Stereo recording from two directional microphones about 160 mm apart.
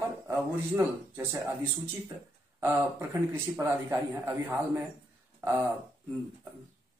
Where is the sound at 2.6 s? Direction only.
15° right (ahead or behind).